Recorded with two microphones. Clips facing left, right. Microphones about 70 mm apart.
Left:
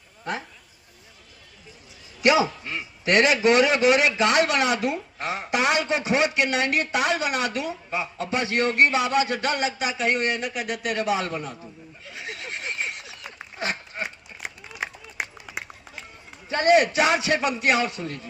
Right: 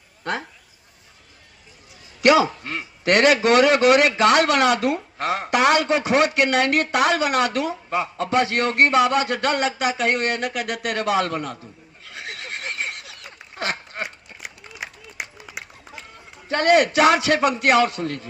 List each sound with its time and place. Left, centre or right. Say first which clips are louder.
2.2 s a man's voice: right 4 dB; right
12.0 s a sound: right 1 dB; right
16.5 s a man's voice: right 2 dB; right